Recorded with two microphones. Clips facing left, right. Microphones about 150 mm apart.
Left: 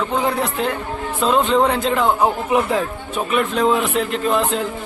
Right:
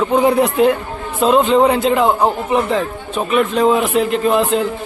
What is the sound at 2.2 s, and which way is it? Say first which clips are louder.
A man's voice: right 2 dB; 10° left (ahead or behind).